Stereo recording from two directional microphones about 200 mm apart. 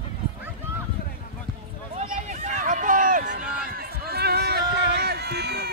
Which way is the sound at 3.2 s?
50° right (ahead or behind).